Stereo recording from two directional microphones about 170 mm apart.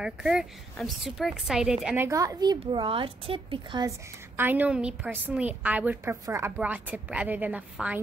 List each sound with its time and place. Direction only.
0.0 s speech: 5° right (ahead or behind)
2.0 s speech: 20° right (ahead or behind)
4.4 s a woman's voice: 10° right (ahead or behind)